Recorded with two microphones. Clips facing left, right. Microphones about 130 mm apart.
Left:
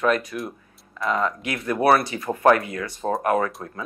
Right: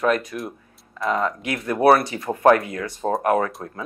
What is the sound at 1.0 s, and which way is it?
Speech, 30° right (ahead or behind).